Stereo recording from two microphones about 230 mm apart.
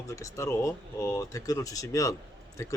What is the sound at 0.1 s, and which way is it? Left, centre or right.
A man's voice, centre.